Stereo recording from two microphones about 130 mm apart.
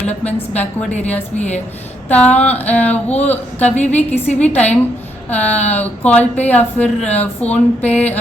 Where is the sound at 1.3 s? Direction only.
60° left (ahead or behind).